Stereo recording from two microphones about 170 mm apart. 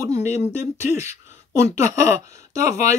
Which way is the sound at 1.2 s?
15° right (ahead or behind).